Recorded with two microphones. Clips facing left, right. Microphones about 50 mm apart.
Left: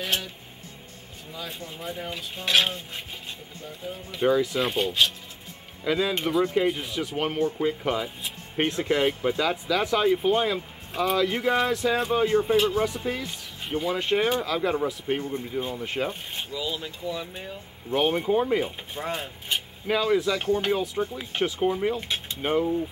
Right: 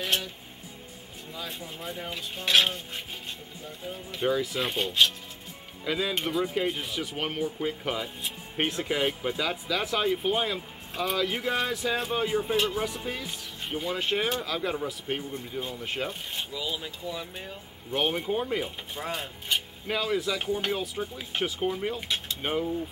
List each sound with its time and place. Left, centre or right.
0.0 s music: centre
1.8 s speech: centre
3.8 s speech: centre
15.3 s speech: centre
15.8 s speech: centre
16.5 s speech: centre
22.6 s speech: centre